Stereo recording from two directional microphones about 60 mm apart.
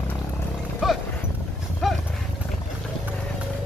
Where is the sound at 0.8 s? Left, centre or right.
Centre.